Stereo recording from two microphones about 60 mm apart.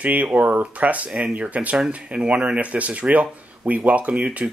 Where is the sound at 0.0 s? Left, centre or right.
Right.